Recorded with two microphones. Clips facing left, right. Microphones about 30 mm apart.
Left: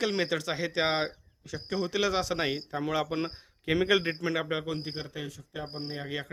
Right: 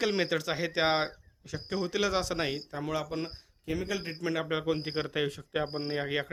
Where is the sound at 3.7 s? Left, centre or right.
Left.